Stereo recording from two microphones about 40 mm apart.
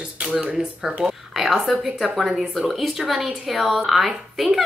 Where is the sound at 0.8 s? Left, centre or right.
Centre.